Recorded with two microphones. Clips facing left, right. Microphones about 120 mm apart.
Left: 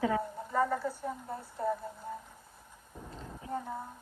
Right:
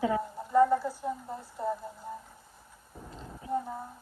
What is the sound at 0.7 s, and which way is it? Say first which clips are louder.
Speech: right 5 dB; centre (ahead or behind).